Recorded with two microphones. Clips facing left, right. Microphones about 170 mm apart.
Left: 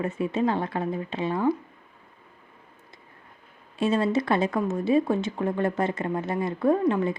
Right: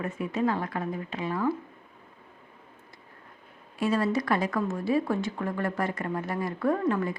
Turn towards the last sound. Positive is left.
turn(degrees=20)  # may be behind; listen again after turning